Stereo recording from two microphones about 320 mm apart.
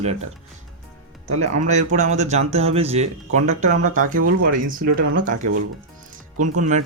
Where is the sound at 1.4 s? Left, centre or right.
Right.